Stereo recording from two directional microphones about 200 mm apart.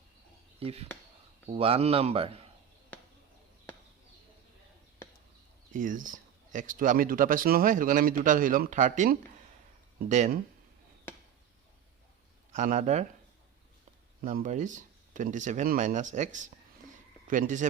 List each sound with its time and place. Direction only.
0.6 s a man's voice: 30° right (ahead or behind)
5.7 s speech: 40° right (ahead or behind)
12.5 s speech: 40° right (ahead or behind)
14.2 s speech: 45° right (ahead or behind)